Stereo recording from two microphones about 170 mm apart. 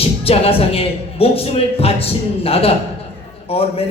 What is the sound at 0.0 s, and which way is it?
A woman's voice, 35° left (ahead or behind).